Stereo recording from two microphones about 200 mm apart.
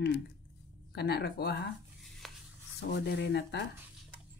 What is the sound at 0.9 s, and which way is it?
Speech, 55° left (ahead or behind).